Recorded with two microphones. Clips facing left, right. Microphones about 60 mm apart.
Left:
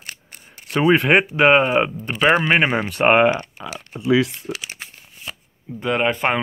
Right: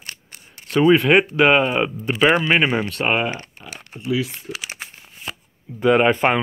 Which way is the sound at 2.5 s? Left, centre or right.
Centre.